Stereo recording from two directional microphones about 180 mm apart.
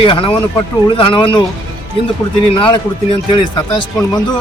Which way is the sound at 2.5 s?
30° left (ahead or behind).